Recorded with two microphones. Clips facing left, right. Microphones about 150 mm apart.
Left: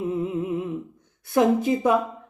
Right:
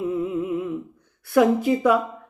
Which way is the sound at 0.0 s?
25° left (ahead or behind).